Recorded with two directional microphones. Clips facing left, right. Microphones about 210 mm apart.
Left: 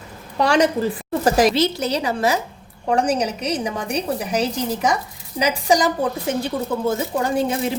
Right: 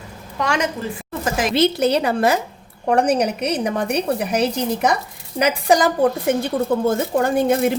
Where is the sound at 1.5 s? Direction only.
55° right (ahead or behind).